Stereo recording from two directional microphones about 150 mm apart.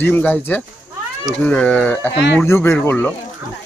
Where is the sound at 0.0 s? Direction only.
10° left (ahead or behind).